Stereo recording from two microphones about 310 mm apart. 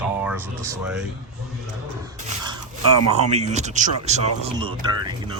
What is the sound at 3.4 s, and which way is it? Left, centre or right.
Speech, right.